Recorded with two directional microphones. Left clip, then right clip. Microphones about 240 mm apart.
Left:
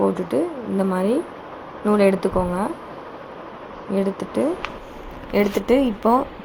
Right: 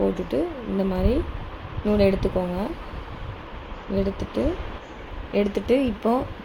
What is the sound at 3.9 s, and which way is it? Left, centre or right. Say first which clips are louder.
A woman's voice: left 3 dB; centre.